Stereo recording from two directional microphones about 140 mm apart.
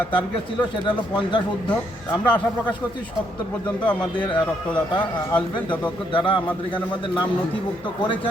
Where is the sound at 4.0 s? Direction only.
35° left (ahead or behind).